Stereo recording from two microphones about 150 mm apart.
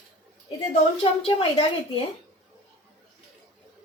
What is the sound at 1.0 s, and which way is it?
A woman's voice, 40° left (ahead or behind).